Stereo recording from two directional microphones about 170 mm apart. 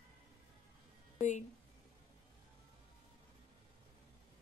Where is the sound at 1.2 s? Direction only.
45° left (ahead or behind).